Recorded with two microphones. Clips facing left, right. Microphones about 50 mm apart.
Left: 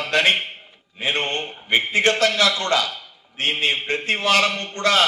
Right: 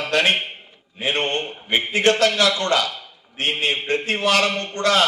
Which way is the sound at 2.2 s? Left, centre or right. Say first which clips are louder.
Right 1 dB; left.